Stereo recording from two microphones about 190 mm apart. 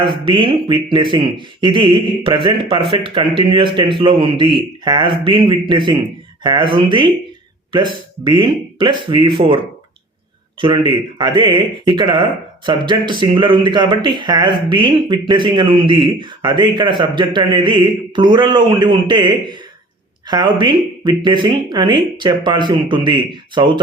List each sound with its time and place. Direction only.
0.0 s a man's voice: 25° right (ahead or behind)
10.6 s a man's voice: 25° right (ahead or behind)